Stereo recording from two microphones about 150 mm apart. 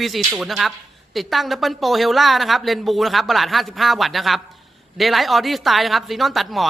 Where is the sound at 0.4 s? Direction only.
Centre (ahead or behind).